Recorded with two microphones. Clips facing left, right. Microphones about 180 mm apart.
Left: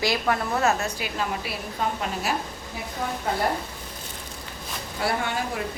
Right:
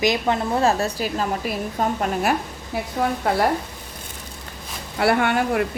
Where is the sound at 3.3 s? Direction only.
75° right (ahead or behind).